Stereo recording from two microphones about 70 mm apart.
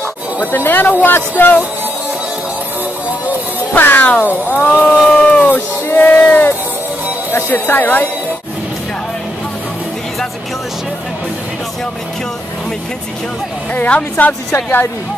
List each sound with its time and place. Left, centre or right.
0.4 s music: left
3.7 s music: left
5.0 s a sound: centre
5.5 s a sound: left
7.3 s music: left
13.7 s music: left